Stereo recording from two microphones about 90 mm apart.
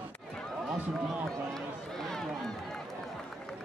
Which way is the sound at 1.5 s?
5° left (ahead or behind).